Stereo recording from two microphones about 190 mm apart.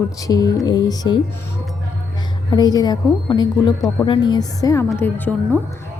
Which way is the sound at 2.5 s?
20° left (ahead or behind).